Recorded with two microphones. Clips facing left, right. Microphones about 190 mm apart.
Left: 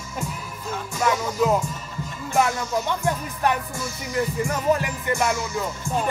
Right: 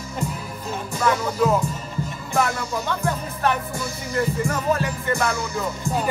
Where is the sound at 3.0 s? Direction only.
15° left (ahead or behind).